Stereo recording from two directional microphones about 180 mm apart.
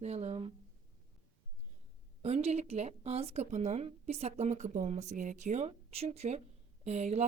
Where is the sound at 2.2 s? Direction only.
35° right (ahead or behind).